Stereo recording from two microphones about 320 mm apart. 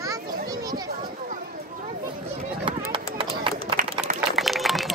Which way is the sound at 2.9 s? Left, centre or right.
Centre.